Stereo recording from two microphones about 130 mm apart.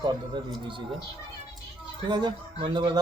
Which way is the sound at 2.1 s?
35° right (ahead or behind).